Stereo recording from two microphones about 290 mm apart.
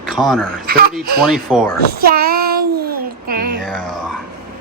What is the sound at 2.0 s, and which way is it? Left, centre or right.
Child singing, right.